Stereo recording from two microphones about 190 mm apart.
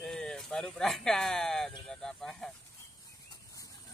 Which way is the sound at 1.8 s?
Centre (ahead or behind).